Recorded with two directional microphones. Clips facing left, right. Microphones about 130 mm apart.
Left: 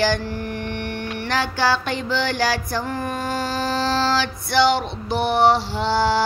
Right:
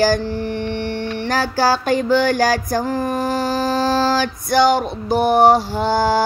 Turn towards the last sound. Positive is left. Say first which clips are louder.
# right 3 dB
turn(degrees=-45)  # may be behind; listen again after turning